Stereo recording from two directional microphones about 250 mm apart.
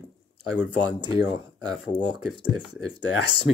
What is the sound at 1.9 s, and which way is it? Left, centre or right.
Speech, centre.